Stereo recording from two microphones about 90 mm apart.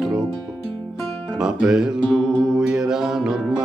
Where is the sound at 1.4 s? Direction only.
5° right (ahead or behind).